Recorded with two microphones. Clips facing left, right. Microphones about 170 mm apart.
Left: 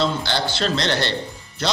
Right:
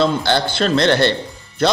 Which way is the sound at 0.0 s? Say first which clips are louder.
Right 5 dB; 55° right (ahead or behind).